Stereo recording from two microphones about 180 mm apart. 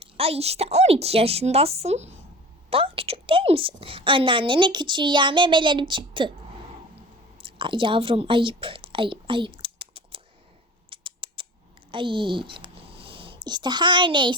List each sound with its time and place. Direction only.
0.0 s a woman's voice: 35° right (ahead or behind)
7.4 s a woman's voice: 30° right (ahead or behind)
10.8 s a sound: 30° right (ahead or behind)
11.9 s speech: 30° right (ahead or behind)